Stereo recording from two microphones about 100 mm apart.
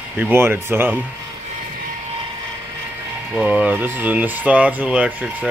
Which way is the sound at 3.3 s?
10° right (ahead or behind).